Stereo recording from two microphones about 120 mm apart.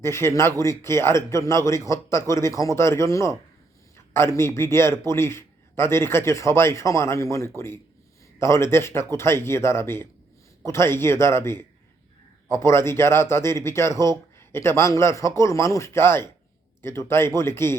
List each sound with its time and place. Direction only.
0.0 s a man's voice: 20° left (ahead or behind)